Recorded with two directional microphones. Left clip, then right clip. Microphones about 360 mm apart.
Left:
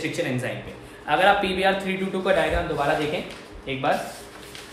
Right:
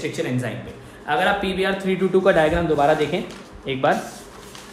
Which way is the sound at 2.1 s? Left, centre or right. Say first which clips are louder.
Right 11 dB; centre.